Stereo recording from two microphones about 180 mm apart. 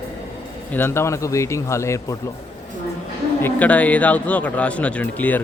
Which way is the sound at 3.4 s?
10° left (ahead or behind).